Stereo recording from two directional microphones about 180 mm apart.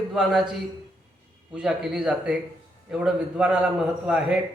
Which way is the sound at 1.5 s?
5° right (ahead or behind).